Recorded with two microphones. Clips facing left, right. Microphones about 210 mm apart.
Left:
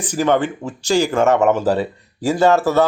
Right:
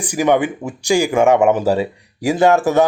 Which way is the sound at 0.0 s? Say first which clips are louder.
Right 2 dB; 10° right (ahead or behind).